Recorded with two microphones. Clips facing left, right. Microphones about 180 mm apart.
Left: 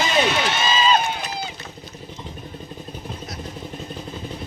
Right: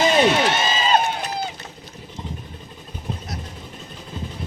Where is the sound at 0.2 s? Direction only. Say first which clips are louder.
Right 3 dB; 45° right (ahead or behind).